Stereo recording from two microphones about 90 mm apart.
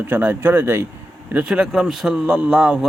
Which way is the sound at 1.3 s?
15° right (ahead or behind).